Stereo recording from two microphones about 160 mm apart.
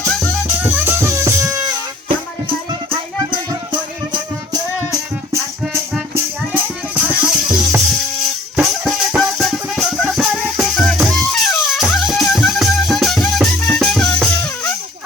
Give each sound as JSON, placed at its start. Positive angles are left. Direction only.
{"t": 0.0, "sound": "music", "side_deg": 10}
{"t": 0.6, "sound": "music", "side_deg": -10}
{"t": 3.5, "sound": "music", "side_deg": -25}
{"t": 6.5, "sound": "music", "side_deg": -10}